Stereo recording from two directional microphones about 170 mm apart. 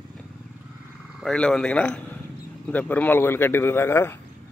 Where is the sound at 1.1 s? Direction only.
5° left (ahead or behind).